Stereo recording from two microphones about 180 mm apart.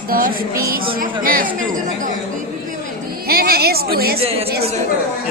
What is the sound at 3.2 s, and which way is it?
Speech, 55° right (ahead or behind).